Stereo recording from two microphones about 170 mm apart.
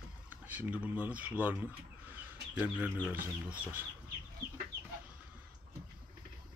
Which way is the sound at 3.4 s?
10° right (ahead or behind).